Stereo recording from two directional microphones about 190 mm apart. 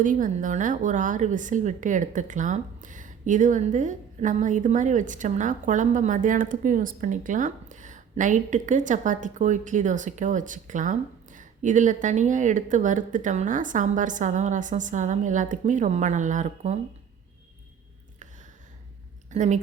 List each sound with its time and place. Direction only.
0.0 s a woman's voice: 45° right (ahead or behind)
19.3 s a woman's voice: 40° right (ahead or behind)